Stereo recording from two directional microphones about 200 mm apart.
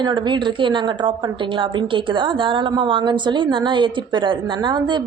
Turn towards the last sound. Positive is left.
turn(degrees=-25)  # may be behind; listen again after turning